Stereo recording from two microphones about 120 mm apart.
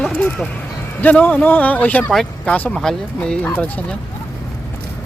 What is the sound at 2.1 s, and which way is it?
Speech, centre (ahead or behind).